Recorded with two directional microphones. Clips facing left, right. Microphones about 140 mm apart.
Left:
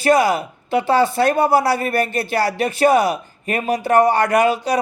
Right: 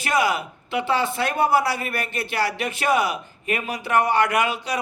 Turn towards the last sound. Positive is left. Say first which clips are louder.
# left 7 dB
turn(degrees=40)  # may be behind; listen again after turning